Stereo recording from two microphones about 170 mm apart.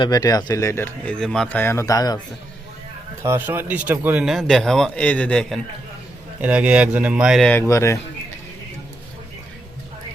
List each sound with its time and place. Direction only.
0.0 s speech: 20° left (ahead or behind)
3.2 s a man's voice: 10° right (ahead or behind); by 5.5 s 5° left (ahead or behind)
6.4 s speech: 5° right (ahead or behind)
7.4 s speech: 15° left (ahead or behind)